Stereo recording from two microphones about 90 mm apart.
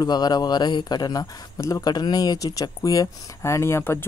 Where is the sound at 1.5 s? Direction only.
35° left (ahead or behind).